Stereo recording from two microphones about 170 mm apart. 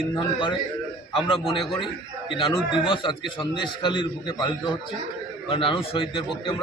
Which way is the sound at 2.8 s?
30° left (ahead or behind).